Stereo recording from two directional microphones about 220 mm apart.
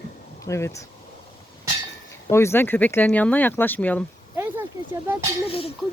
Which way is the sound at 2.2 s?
10° left (ahead or behind).